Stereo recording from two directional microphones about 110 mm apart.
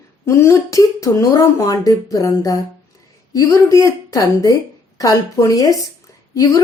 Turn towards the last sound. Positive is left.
turn(degrees=35)  # may be behind; listen again after turning